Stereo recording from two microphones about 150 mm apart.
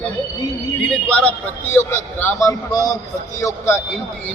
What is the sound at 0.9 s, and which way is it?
A man's voice, 10° left (ahead or behind).